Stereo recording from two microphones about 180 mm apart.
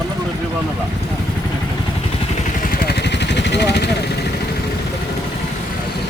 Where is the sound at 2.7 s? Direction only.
60° left (ahead or behind).